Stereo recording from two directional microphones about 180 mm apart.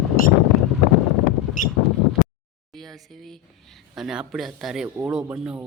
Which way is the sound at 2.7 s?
Centre (ahead or behind).